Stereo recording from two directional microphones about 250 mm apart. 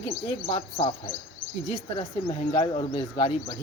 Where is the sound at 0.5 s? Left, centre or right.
Left.